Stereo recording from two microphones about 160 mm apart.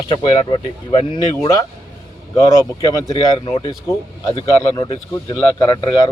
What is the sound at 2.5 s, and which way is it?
Speech, 20° left (ahead or behind).